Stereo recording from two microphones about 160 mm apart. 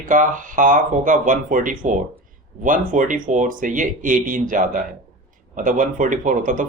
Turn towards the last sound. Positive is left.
turn(degrees=-55)  # may be behind; listen again after turning